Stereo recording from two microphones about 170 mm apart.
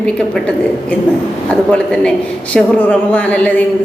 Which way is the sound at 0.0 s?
5° left (ahead or behind).